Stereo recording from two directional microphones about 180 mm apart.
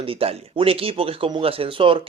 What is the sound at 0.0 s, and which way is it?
Speech, 30° right (ahead or behind).